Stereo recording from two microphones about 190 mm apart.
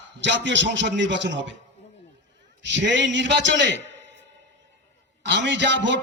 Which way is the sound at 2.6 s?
70° right (ahead or behind).